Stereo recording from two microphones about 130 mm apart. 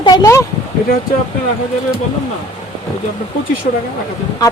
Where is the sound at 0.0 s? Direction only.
30° left (ahead or behind).